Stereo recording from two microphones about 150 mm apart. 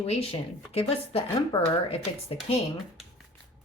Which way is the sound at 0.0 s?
40° left (ahead or behind).